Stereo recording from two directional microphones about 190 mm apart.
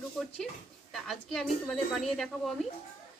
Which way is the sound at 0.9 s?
Centre (ahead or behind).